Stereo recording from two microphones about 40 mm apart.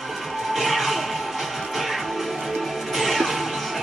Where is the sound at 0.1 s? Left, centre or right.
Centre.